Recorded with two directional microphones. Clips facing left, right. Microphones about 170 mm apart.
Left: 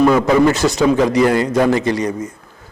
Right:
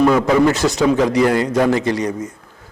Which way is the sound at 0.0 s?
20° left (ahead or behind).